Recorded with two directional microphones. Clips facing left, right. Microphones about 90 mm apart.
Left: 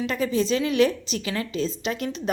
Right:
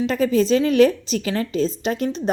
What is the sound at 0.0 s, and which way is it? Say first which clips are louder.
A woman's voice: right 5 dB; 40° right (ahead or behind).